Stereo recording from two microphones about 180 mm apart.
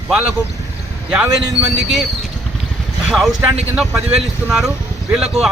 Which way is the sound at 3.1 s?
Centre (ahead or behind).